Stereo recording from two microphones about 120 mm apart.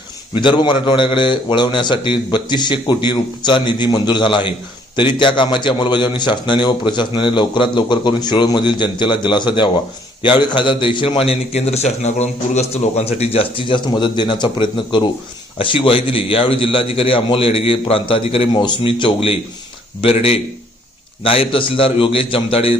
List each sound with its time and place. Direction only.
0.3 s a man's voice: 40° left (ahead or behind)